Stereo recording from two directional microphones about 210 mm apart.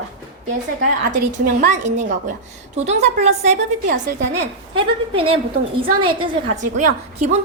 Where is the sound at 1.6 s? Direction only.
35° right (ahead or behind).